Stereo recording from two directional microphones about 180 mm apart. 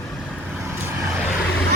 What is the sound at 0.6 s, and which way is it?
Vehicle, 15° right (ahead or behind).